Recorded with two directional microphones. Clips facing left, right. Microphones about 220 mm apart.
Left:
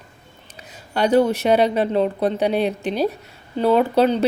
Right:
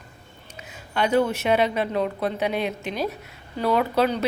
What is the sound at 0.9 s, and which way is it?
A woman's voice, 35° left (ahead or behind).